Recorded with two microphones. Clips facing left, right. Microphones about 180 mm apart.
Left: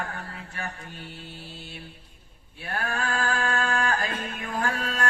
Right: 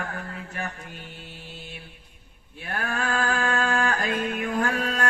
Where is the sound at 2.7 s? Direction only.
35° left (ahead or behind).